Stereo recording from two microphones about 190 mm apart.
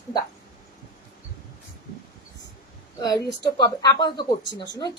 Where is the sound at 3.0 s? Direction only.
20° left (ahead or behind).